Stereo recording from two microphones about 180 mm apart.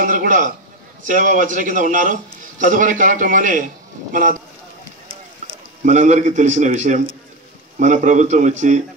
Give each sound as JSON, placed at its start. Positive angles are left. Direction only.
{"t": 0.0, "sound": "a sound", "side_deg": -50}
{"t": 1.0, "sound": "a man's voice", "side_deg": -45}
{"t": 5.9, "sound": "a man's voice", "side_deg": -40}